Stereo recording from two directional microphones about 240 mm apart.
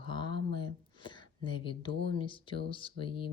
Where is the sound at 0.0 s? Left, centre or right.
Centre.